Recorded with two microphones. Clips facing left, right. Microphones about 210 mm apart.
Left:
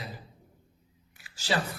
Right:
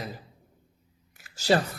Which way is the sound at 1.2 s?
45° right (ahead or behind).